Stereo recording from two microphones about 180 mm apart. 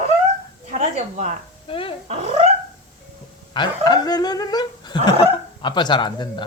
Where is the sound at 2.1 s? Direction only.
35° right (ahead or behind).